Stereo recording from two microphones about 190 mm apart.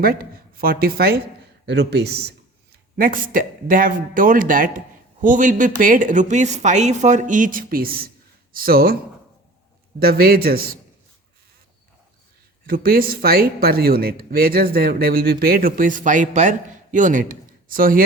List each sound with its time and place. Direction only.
0.0 s speech: 50° right (ahead or behind)
2.9 s speech: 45° right (ahead or behind)
10.0 s speech: 55° right (ahead or behind)
12.6 s speech: 50° right (ahead or behind)